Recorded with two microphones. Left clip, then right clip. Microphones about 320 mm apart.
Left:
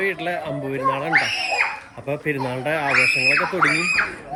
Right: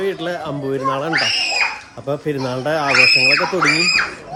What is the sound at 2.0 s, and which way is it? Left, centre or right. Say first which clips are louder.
Speech: right 3 dB; centre.